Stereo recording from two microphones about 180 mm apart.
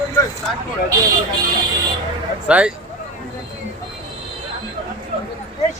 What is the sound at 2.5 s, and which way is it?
Speech, 5° right (ahead or behind).